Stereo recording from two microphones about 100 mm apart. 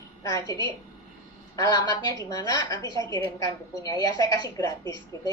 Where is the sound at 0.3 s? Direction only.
35° left (ahead or behind).